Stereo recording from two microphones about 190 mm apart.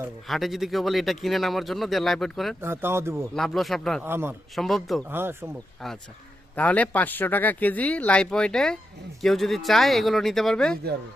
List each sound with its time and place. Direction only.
0.3 s speech: centre (ahead or behind)
2.6 s speech: 10° right (ahead or behind)
3.3 s speech: centre (ahead or behind)
4.0 s speech: 10° right (ahead or behind)
4.5 s speech: centre (ahead or behind)
5.0 s speech: 10° right (ahead or behind)
5.8 s speech: centre (ahead or behind)